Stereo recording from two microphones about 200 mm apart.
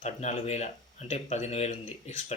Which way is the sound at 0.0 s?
35° left (ahead or behind).